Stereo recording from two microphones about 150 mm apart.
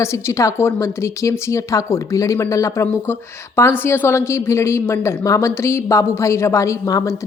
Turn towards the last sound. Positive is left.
turn(degrees=20)  # may be behind; listen again after turning